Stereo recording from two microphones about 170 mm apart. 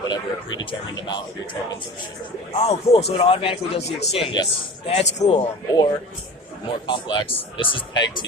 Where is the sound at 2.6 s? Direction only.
35° left (ahead or behind).